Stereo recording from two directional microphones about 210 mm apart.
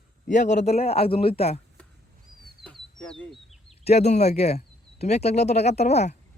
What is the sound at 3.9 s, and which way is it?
Speech, 30° left (ahead or behind).